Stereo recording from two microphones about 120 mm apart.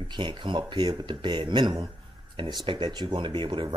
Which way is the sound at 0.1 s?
40° right (ahead or behind).